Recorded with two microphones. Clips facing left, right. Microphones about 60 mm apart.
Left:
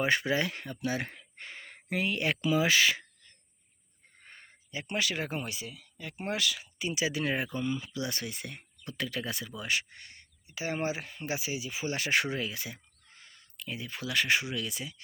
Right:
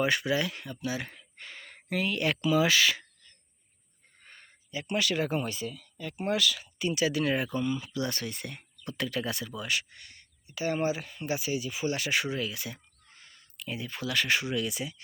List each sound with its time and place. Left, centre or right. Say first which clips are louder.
0.0 s speech: right 1 dB; left
1.4 s a sound: even; left
2.4 s speech: right 1 dB; left
4.2 s a sound: left 1 dB; left
5.4 s speech: right 5 dB; centre
6.1 s speech: right 4 dB; left
6.6 s speech: right 4 dB; centre
9.6 s speech: even; left
11.9 s speech: left 1 dB; left
12.4 s speech: right 2 dB; left
13.6 s speech: right 2 dB; centre
14.0 s speech: even; centre
14.5 s speech: right 5 dB; centre